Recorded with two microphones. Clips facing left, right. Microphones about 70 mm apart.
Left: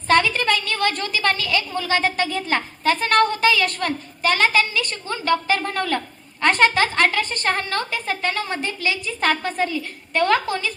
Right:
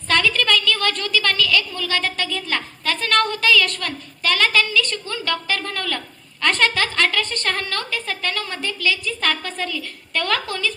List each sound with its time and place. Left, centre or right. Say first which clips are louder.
0.1 s a woman's voice: left 1 dB; left